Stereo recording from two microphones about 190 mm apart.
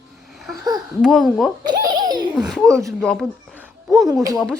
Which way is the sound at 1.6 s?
25° right (ahead or behind).